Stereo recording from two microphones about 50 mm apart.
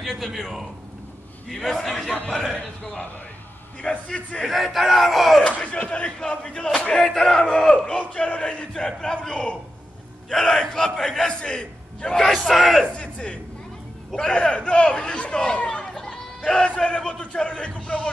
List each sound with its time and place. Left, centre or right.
0.0 s speech: centre
2.5 s speech: centre
4.5 s speech: centre
5.4 s speech: left
12.3 s speech: centre
12.9 s speech: left
14.5 s speech: left
15.9 s chatter: centre
16.6 s speech: left